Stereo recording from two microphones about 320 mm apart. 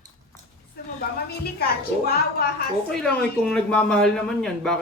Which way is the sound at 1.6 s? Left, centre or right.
Left.